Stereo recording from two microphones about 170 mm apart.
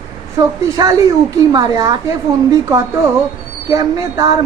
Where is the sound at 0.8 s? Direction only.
20° right (ahead or behind).